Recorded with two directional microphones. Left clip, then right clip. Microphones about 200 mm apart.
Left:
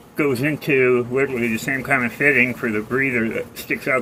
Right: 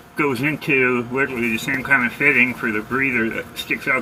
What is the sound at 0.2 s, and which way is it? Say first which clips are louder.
Speech: even; 20° left (ahead or behind).